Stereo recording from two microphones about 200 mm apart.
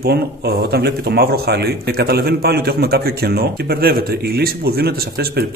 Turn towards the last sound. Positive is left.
turn(degrees=-50)  # may be behind; listen again after turning